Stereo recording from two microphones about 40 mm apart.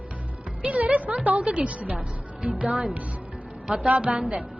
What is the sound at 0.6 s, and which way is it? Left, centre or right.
Music, right.